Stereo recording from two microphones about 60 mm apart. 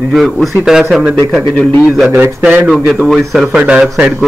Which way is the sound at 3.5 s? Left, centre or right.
Right.